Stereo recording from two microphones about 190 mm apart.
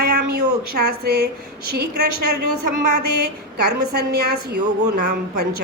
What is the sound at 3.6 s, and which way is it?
A woman's voice, 55° right (ahead or behind).